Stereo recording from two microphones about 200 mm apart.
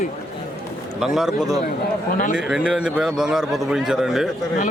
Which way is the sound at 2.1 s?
40° left (ahead or behind).